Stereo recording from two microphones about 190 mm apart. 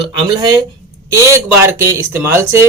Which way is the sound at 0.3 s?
20° right (ahead or behind).